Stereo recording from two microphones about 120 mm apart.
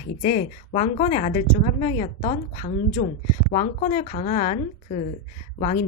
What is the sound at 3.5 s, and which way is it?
Speech, 80° left.